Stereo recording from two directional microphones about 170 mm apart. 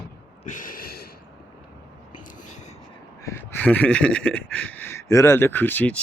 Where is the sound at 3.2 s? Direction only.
15° left (ahead or behind).